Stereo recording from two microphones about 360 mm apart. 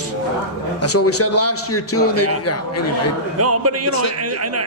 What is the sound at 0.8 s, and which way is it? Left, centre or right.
A man's voice, left.